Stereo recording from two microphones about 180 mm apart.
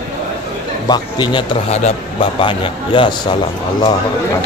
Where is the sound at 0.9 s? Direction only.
25° left (ahead or behind).